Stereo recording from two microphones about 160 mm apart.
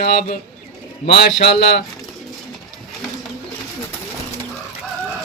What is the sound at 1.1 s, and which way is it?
Speech, 90° left.